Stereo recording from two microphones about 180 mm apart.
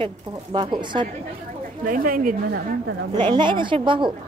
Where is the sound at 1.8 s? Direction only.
50° right (ahead or behind).